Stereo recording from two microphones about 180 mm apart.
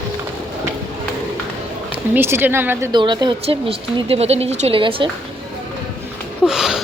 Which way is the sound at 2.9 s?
25° right (ahead or behind).